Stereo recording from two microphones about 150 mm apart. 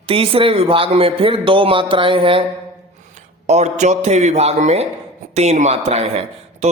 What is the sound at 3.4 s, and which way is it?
Mantra, 50° right (ahead or behind).